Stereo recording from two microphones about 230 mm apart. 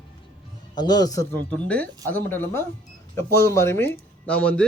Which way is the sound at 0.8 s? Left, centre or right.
Centre.